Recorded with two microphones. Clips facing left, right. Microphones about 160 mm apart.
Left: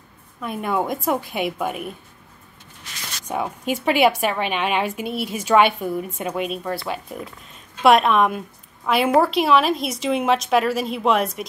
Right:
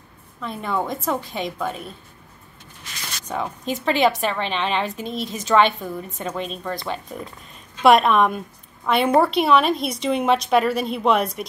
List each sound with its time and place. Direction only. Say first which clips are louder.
0.4 s a woman's voice: left 2 dB; 10° left (ahead or behind)
3.3 s a woman's voice: left 2 dB; 10° left (ahead or behind)